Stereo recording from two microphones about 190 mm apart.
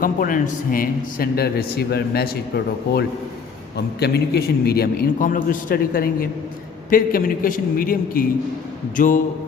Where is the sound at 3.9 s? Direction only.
60° left (ahead or behind).